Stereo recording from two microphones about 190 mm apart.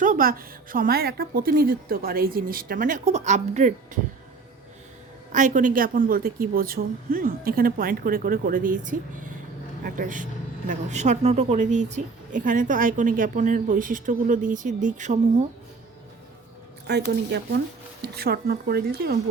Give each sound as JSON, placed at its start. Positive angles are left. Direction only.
{"t": 0.0, "sound": "a woman's voice", "side_deg": -45}
{"t": 5.3, "sound": "a woman's voice", "side_deg": -40}
{"t": 16.9, "sound": "speech", "side_deg": -60}